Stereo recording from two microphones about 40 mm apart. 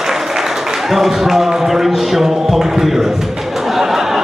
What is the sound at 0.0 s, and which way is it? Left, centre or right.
Speech, centre.